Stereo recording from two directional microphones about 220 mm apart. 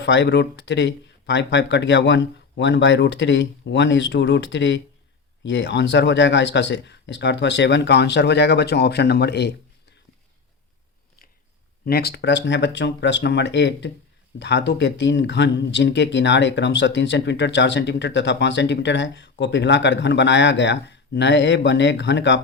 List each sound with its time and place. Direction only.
0.0 s speech: 50° left (ahead or behind)
11.9 s speech: 45° left (ahead or behind)